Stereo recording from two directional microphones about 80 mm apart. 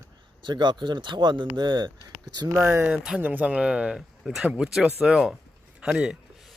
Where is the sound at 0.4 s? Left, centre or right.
Right.